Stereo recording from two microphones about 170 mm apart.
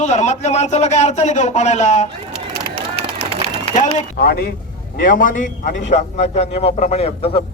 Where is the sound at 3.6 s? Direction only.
40° left (ahead or behind).